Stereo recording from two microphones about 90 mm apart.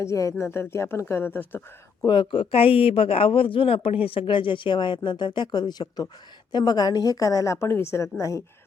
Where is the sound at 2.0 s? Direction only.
60° left (ahead or behind).